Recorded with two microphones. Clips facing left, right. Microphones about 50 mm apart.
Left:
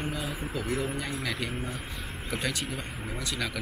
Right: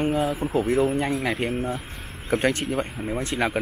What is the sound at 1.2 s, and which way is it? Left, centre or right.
Speech, right.